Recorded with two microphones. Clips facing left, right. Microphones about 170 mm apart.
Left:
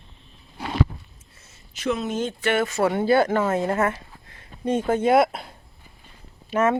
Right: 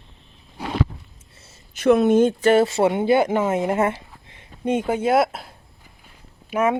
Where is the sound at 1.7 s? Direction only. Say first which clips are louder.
Right 10 dB; 60° right (ahead or behind).